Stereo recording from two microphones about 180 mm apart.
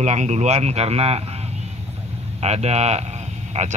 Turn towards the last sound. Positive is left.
turn(degrees=-40)  # may be behind; listen again after turning